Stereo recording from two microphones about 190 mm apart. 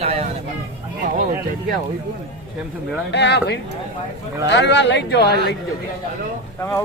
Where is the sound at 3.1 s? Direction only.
65° left (ahead or behind).